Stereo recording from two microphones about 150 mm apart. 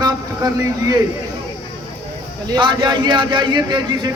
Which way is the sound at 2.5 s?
30° right (ahead or behind).